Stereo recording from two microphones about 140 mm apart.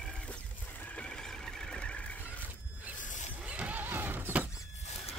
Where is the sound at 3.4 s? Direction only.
10° right (ahead or behind).